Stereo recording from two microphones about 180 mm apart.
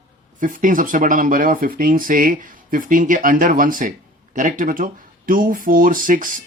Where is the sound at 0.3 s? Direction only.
45° right (ahead or behind).